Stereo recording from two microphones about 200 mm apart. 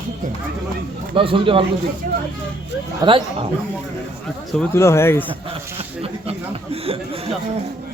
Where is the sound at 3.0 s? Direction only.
25° right (ahead or behind).